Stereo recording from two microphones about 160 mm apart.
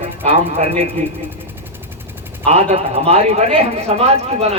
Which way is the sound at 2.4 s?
40° right (ahead or behind).